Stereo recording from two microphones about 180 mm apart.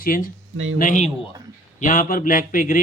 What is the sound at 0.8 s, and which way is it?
A man's voice, 45° left (ahead or behind).